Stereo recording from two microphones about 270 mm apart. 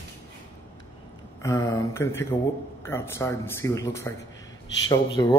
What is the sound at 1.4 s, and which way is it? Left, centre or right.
Speech, centre.